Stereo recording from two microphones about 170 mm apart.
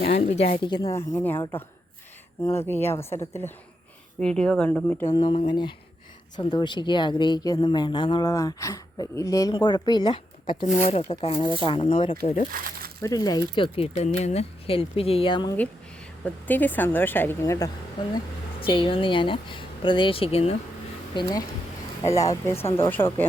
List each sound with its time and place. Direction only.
0.0 s speech: 40° left (ahead or behind)
0.5 s a woman's voice: 30° left (ahead or behind); by 1.6 s 15° left (ahead or behind)
2.6 s a woman's voice: 15° left (ahead or behind)
5.1 s speech: 30° left (ahead or behind)
10.8 s speech: 40° left (ahead or behind)
12.2 s speech: 45° left (ahead or behind)
12.5 s speech: 55° right (ahead or behind)
13.0 s speech: 20° left (ahead or behind)
16.2 s a woman's voice: 10° left (ahead or behind)
18.6 s speech: 30° left (ahead or behind)
22.3 s a woman's voice: 15° left (ahead or behind)